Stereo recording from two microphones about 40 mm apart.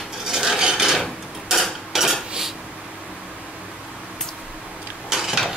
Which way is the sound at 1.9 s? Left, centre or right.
Centre.